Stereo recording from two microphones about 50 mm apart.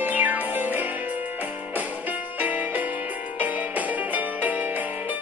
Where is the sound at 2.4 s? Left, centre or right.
Right.